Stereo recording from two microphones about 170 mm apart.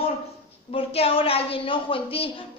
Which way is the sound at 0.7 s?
35° left (ahead or behind).